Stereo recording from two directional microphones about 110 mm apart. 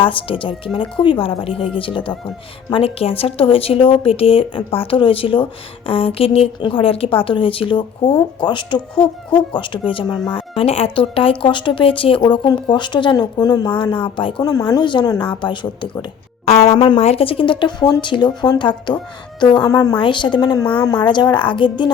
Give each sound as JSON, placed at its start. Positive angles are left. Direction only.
{"t": 0.0, "sound": "a woman's voice", "side_deg": 50}
{"t": 13.7, "sound": "speech", "side_deg": 50}
{"t": 14.5, "sound": "speech", "side_deg": 35}
{"t": 16.5, "sound": "speech", "side_deg": 70}
{"t": 16.7, "sound": "speech", "side_deg": 50}
{"t": 17.0, "sound": "a woman's voice", "side_deg": 65}